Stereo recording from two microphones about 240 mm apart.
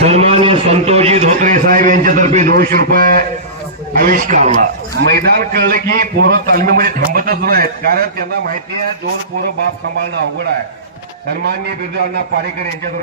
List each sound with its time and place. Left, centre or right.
0.0 s a man's voice: right